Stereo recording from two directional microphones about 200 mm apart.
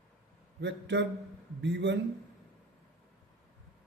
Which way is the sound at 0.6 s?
60° right (ahead or behind).